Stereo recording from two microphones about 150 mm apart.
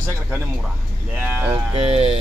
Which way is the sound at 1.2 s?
10° right (ahead or behind).